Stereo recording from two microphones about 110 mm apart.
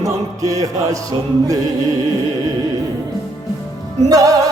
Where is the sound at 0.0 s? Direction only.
30° right (ahead or behind).